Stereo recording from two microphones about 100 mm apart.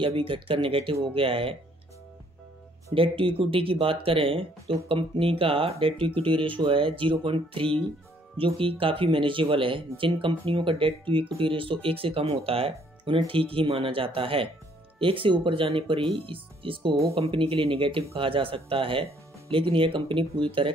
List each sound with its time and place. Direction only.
0.0 s speech: 60° right (ahead or behind)
2.9 s speech: 65° right (ahead or behind)
17.1 s speech: 75° right (ahead or behind)